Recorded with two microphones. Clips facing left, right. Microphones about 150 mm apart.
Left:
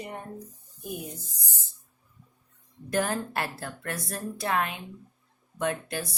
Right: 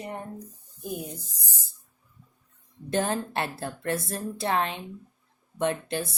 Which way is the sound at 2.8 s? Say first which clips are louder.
Right 1 dB; 25° right (ahead or behind).